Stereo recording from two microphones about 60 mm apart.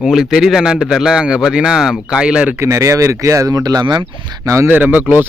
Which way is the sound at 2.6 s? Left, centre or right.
Right.